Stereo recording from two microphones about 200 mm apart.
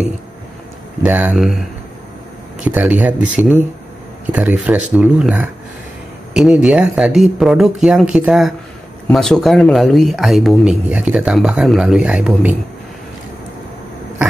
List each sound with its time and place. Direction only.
1.0 s speech: 5° right (ahead or behind)
2.6 s speech: 5° right (ahead or behind)